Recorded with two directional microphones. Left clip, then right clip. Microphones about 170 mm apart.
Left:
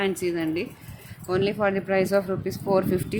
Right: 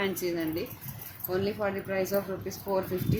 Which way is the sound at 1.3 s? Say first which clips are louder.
Left 7 dB; 60° left (ahead or behind).